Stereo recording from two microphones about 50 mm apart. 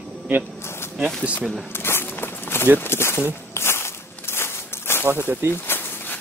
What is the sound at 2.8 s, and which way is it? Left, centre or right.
Speech, left.